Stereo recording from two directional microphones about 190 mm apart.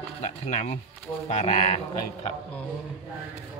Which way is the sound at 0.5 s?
40° left (ahead or behind).